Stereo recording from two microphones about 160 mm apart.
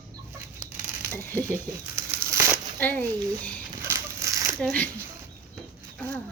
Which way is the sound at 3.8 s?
15° right (ahead or behind).